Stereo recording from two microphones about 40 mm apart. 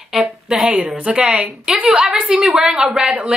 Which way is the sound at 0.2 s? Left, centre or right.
Right.